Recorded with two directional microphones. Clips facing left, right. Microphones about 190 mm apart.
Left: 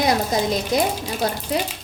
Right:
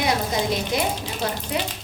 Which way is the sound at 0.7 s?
40° left (ahead or behind).